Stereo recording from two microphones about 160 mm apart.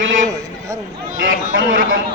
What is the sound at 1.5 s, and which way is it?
Speech, 60° right (ahead or behind).